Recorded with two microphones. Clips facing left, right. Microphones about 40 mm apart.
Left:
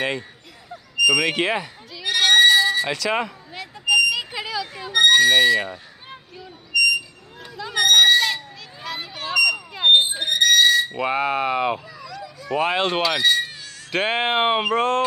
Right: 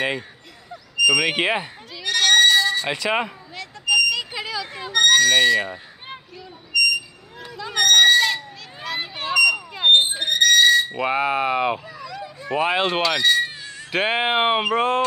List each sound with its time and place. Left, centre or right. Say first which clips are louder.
0.9 s a sound: even; centre
1.3 s speech: right 1 dB; centre
2.0 s a sound: left 1 dB; centre
2.9 s speech: right 1 dB; centre
3.5 s vehicle: left 1 dB; centre
4.9 s a sound: left 1 dB; centre
5.4 s speech: even; centre
6.7 s a sound: left 1 dB; centre
7.5 s owl: even; centre
9.0 s smoke detector: right 2 dB; right
9.3 s smoke detector: right 2 dB; centre
10.1 s owl: even; centre
12.5 s speech: even; centre